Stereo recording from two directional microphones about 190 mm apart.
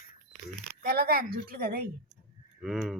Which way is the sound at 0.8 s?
55° right (ahead or behind).